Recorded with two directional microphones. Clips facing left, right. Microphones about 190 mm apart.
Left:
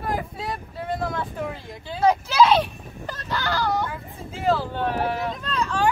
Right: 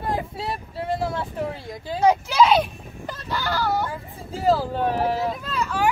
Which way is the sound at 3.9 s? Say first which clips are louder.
Right 2 dB; 35° right (ahead or behind).